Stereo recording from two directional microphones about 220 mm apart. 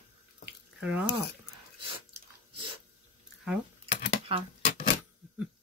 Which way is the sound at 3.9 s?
35° left (ahead or behind).